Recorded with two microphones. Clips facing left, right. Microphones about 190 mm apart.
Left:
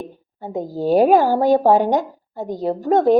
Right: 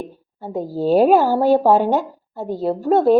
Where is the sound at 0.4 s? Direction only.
15° left (ahead or behind).